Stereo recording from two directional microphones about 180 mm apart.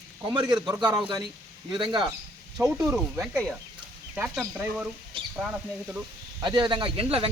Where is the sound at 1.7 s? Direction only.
25° right (ahead or behind).